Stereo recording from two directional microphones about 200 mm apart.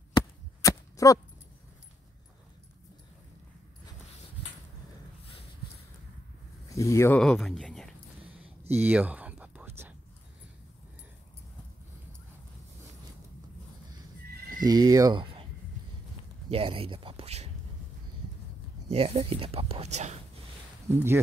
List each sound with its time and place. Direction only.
0.1 s chop: 15° left (ahead or behind)
6.7 s speech: 15° left (ahead or behind)
7.2 s speech: centre (ahead or behind)
8.6 s whispering: 10° right (ahead or behind)
14.6 s speech: 20° right (ahead or behind)
16.4 s speech: 30° right (ahead or behind)
18.9 s speech: 30° right (ahead or behind)
20.9 s speech: 10° right (ahead or behind)